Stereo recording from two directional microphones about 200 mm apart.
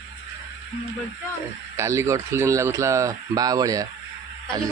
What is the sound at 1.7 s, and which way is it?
Speech, 15° right (ahead or behind).